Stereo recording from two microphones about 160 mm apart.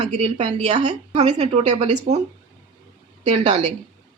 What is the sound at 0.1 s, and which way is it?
Speech, 45° right (ahead or behind).